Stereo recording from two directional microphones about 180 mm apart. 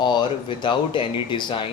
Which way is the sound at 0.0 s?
25° left (ahead or behind).